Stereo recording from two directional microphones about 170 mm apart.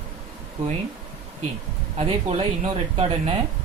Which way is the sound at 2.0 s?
35° right (ahead or behind).